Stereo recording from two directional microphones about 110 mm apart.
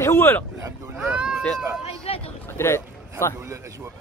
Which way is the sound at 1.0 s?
10° right (ahead or behind).